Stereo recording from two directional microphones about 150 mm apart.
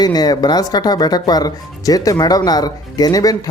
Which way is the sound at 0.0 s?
25° left (ahead or behind).